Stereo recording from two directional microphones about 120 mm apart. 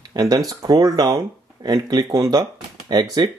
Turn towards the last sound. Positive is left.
turn(degrees=-35)  # may be behind; listen again after turning